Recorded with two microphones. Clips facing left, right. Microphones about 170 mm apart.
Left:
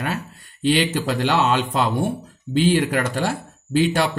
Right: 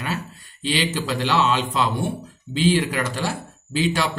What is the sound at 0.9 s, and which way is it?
Speech, 55° left (ahead or behind).